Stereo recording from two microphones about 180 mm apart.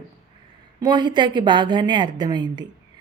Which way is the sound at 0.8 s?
25° right (ahead or behind).